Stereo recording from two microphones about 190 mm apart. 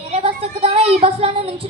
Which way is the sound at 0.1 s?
30° right (ahead or behind).